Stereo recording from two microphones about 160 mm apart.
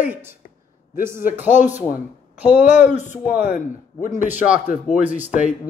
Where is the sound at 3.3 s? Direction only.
5° right (ahead or behind).